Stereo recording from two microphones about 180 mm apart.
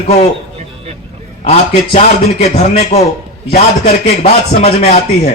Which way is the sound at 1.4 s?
35° left (ahead or behind).